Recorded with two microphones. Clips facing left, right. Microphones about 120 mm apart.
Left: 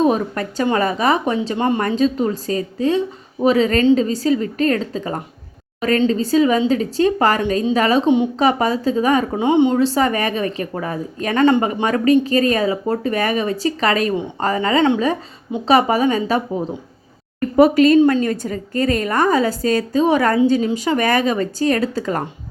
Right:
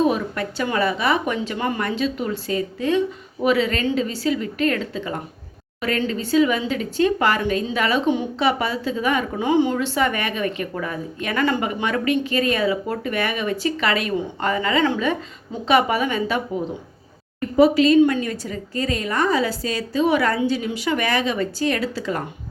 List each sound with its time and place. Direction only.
0.0 s speech: 40° left (ahead or behind)
1.8 s speech: 40° left (ahead or behind)
8.0 s a woman's voice: 20° left (ahead or behind)
8.4 s speech: 40° left (ahead or behind)
9.4 s a woman's voice: 25° left (ahead or behind)
9.7 s speech: 35° left (ahead or behind)
17.6 s a woman's voice: 50° left (ahead or behind)